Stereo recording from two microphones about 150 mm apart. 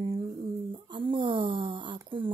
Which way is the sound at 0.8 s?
30° right (ahead or behind).